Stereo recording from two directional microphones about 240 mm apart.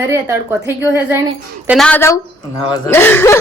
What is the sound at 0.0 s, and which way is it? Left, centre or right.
Speech, centre.